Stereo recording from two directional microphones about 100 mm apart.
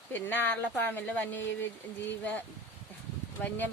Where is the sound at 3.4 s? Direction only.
20° left (ahead or behind).